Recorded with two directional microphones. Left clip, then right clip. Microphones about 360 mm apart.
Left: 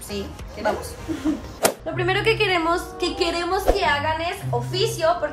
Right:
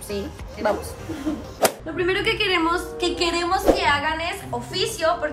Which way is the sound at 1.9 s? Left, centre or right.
Centre.